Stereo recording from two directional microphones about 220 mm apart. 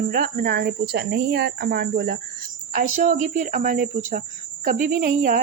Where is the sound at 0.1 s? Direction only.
40° right (ahead or behind).